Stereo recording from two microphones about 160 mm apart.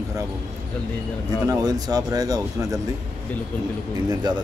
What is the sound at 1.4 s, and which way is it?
Speech, 25° right (ahead or behind).